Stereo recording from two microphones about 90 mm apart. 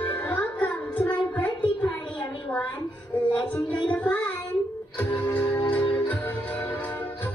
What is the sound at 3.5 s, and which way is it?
Music, 15° left (ahead or behind).